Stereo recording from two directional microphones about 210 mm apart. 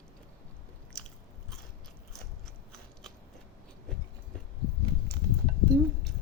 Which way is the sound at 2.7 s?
5° left (ahead or behind).